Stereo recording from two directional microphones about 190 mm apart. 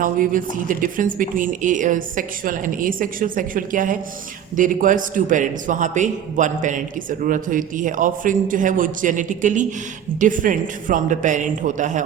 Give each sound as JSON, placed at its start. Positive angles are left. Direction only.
{"t": 0.0, "sound": "a man's voice", "side_deg": -45}